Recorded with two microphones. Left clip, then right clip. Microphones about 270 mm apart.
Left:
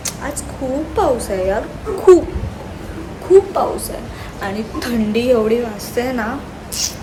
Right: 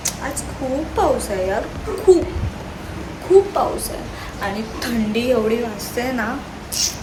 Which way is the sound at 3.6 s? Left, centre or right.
Centre.